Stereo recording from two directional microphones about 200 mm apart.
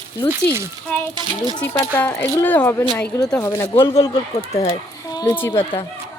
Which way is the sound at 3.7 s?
25° left (ahead or behind).